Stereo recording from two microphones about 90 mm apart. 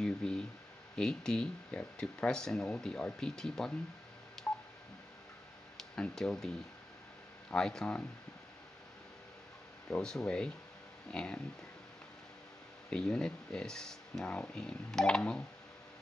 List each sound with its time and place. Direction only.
0.0 s speech: 10° left (ahead or behind)
4.5 s telephone dialing: 15° left (ahead or behind)
5.8 s speech: 5° left (ahead or behind)
7.5 s speech: 5° left (ahead or behind)
9.8 s speech: 5° left (ahead or behind)
12.9 s speech: 10° left (ahead or behind)